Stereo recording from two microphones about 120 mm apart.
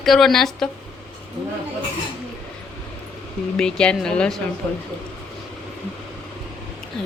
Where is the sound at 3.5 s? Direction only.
5° left (ahead or behind).